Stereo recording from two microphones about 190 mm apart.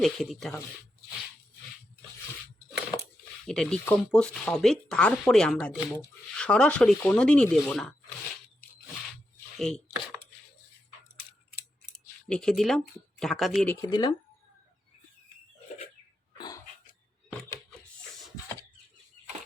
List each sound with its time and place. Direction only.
0.0 s speech: centre (ahead or behind)
3.4 s speech: 5° left (ahead or behind)
9.6 s speech: 5° left (ahead or behind)
12.3 s speech: 5° left (ahead or behind)
13.7 s speech: 20° left (ahead or behind)